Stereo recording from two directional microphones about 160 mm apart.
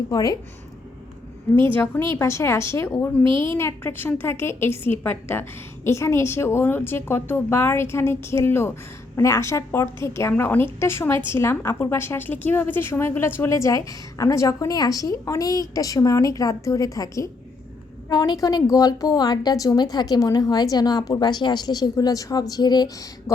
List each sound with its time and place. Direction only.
0.1 s a woman's voice: 20° left (ahead or behind)
1.7 s a woman's voice: 10° left (ahead or behind)
3.2 s a woman's voice: 30° right (ahead or behind)
3.6 s a woman's voice: 15° left (ahead or behind)